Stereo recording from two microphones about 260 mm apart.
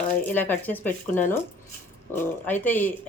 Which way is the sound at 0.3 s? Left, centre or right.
Centre.